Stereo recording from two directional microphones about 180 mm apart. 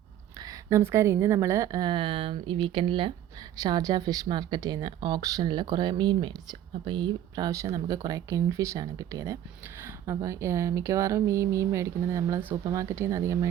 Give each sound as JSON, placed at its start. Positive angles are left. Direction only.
{"t": 0.4, "sound": "speech", "side_deg": -15}